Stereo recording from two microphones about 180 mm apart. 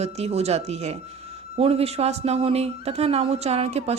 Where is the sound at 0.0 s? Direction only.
35° right (ahead or behind).